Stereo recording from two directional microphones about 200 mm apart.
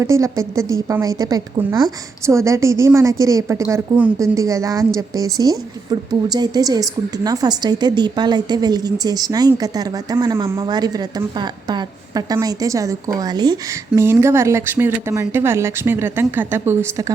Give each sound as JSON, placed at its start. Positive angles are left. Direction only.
{"t": 0.0, "sound": "a woman's voice", "side_deg": -15}